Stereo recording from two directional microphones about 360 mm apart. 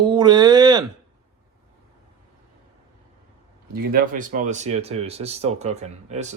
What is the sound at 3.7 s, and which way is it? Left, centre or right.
Speech, right.